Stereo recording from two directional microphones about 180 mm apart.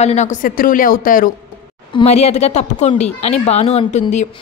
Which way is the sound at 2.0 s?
40° left (ahead or behind).